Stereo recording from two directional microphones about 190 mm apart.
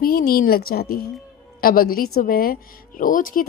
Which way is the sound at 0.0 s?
50° left (ahead or behind).